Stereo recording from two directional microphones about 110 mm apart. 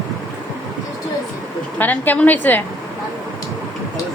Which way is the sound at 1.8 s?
15° left (ahead or behind).